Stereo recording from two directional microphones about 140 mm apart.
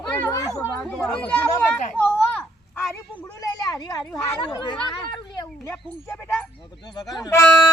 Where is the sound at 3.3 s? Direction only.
25° left (ahead or behind).